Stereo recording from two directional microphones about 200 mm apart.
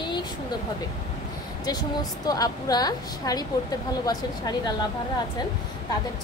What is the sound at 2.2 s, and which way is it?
Speech, 20° left (ahead or behind).